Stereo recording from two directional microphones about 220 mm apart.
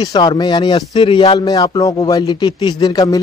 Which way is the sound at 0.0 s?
20° left (ahead or behind).